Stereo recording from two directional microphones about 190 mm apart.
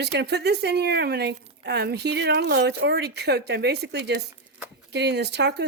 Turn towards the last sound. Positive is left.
turn(degrees=-60)  # may be behind; listen again after turning